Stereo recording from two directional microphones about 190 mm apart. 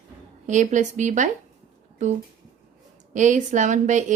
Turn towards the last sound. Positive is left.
turn(degrees=-40)  # may be behind; listen again after turning